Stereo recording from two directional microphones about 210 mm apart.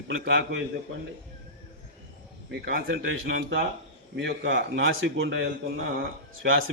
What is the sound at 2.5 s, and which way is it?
A man's voice, 50° right (ahead or behind).